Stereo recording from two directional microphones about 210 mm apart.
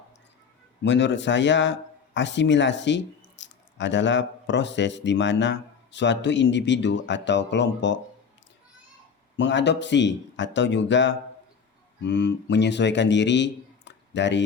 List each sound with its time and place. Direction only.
0.8 s speech: 60° left (ahead or behind)
9.3 s a man's voice: 60° left (ahead or behind)